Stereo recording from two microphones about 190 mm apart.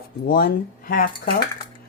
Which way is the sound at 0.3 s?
50° left (ahead or behind).